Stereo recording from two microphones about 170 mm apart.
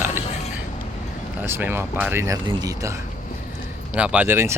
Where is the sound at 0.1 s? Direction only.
40° left (ahead or behind).